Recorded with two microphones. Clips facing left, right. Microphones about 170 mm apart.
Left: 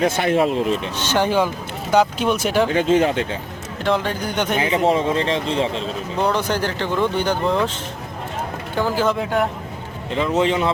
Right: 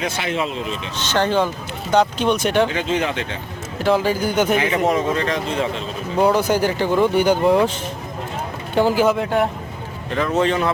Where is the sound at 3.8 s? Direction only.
5° right (ahead or behind).